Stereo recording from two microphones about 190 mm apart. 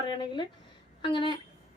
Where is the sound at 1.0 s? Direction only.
25° left (ahead or behind).